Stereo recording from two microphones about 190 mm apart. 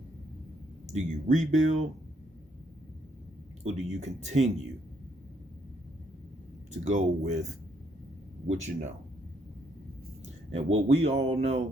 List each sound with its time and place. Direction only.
0.9 s speech: 40° right (ahead or behind)
3.6 s speech: 35° right (ahead or behind)
6.7 s speech: 40° right (ahead or behind)
10.5 s speech: 35° right (ahead or behind)